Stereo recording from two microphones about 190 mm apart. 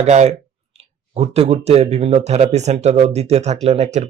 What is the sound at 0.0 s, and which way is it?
Speech, 35° right (ahead or behind).